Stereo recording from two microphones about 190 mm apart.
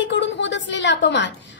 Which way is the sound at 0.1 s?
65° left (ahead or behind).